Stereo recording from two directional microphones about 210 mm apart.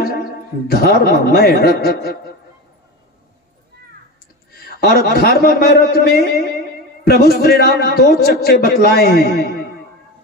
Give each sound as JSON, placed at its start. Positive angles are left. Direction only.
{"t": 0.0, "sound": "a man's voice", "side_deg": 45}
{"t": 4.6, "sound": "a man's voice", "side_deg": 45}